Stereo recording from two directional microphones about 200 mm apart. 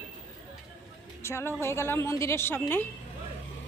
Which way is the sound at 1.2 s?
15° left (ahead or behind).